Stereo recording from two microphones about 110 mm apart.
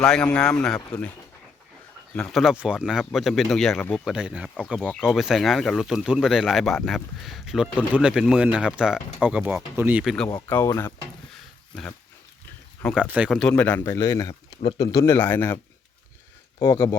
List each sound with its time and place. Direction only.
0.0 s speech: 10° left (ahead or behind)
2.1 s speech: 5° left (ahead or behind); by 10.0 s 15° right (ahead or behind)
10.7 s speech: 25° left (ahead or behind)
13.0 s speech: 10° right (ahead or behind)
13.5 s speech: 15° left (ahead or behind)
13.8 s speech: 30° left (ahead or behind)
15.2 s speech: 20° left (ahead or behind)
16.6 s speech: 30° left (ahead or behind)